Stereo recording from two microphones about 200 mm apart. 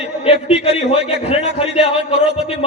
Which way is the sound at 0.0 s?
35° left (ahead or behind).